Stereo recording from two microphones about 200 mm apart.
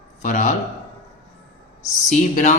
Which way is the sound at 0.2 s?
40° left (ahead or behind).